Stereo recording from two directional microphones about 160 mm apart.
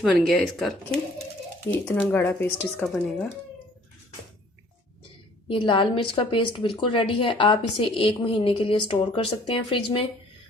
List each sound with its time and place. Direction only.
0.0 s speech: centre (ahead or behind)
2.8 s speech: centre (ahead or behind)
5.5 s a woman's voice: 30° left (ahead or behind)